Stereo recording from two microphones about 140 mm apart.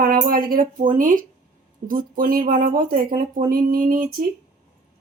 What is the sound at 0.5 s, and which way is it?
Speech, 75° right (ahead or behind).